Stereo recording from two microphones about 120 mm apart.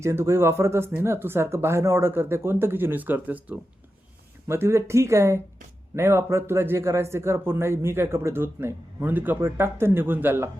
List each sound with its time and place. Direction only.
0.0 s a man's voice: 25° right (ahead or behind)